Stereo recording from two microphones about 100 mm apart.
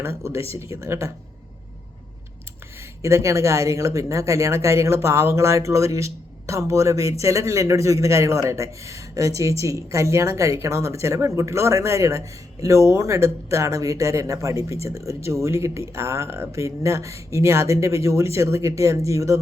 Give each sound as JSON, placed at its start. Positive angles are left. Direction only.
{"t": 0.0, "sound": "speech", "side_deg": -25}
{"t": 3.0, "sound": "speech", "side_deg": -30}